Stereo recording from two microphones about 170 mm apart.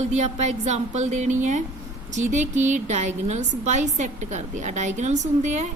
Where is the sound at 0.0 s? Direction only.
40° right (ahead or behind).